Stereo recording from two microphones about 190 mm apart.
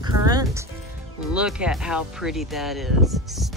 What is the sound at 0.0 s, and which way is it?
Music, 20° right (ahead or behind).